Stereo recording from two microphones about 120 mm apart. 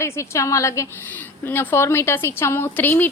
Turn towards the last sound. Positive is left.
turn(degrees=15)  # may be behind; listen again after turning